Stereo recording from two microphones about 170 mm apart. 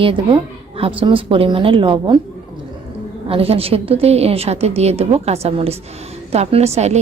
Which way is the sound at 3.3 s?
35° right (ahead or behind).